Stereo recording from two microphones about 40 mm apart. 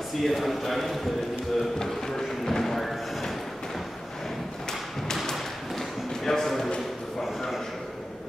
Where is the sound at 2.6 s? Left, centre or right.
Centre.